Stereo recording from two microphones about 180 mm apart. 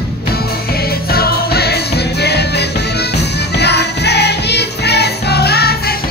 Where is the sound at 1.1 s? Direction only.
60° left (ahead or behind).